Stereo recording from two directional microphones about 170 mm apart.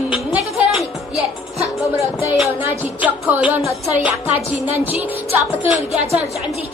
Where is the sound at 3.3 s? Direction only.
10° right (ahead or behind).